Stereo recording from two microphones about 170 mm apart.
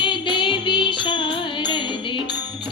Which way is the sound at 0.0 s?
30° left (ahead or behind).